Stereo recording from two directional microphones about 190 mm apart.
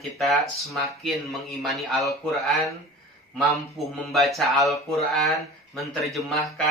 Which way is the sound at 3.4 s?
Centre (ahead or behind).